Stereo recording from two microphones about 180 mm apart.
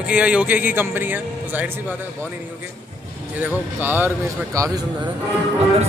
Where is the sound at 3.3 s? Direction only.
10° right (ahead or behind).